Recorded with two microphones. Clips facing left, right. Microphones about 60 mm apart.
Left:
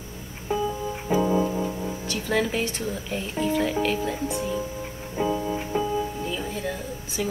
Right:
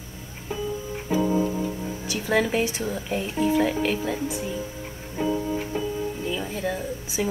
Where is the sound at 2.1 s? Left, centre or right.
Centre.